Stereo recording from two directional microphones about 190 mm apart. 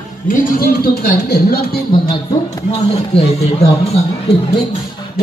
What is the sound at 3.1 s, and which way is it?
Speech, 30° left (ahead or behind).